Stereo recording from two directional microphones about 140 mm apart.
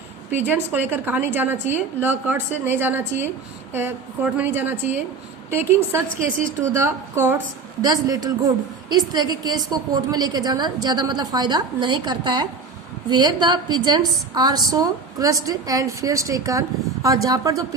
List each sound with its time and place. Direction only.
0.3 s a woman's voice: 15° right (ahead or behind)
6.1 s a woman's voice: 65° right (ahead or behind)
6.7 s a woman's voice: 20° right (ahead or behind)